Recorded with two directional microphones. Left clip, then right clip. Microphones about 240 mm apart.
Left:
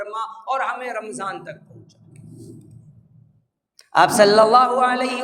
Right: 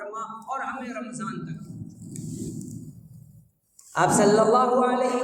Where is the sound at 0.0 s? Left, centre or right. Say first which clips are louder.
Left 6 dB; left.